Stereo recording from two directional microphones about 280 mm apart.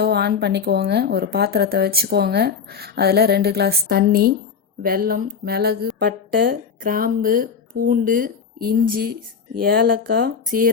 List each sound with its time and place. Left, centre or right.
0.0 s a woman's voice: right